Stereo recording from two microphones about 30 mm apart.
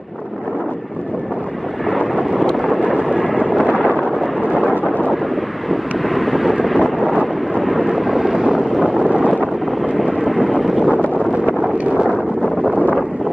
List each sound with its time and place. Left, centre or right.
2.5 s vehicle: centre
3.0 s vehicle: centre
5.1 s vehicle: centre
6.6 s wind noise: centre
7.9 s vehicle: centre
9.0 s wind noise: right
10.0 s vehicle: centre
10.6 s wind noise: centre